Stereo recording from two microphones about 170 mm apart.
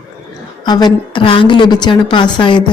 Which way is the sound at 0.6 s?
25° left (ahead or behind).